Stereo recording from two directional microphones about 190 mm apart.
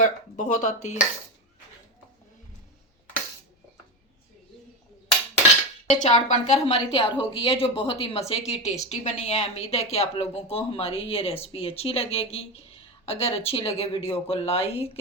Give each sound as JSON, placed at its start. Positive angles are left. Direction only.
{"t": 0.0, "sound": "a woman's voice", "side_deg": 40}
{"t": 5.9, "sound": "a woman's voice", "side_deg": 40}